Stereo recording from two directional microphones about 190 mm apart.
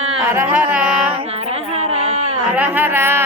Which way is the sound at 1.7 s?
35° right (ahead or behind).